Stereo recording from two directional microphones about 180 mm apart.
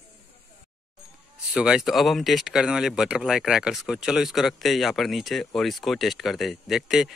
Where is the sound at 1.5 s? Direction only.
5° right (ahead or behind).